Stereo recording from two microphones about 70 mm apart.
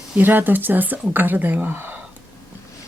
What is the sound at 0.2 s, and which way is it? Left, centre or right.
Speech, right.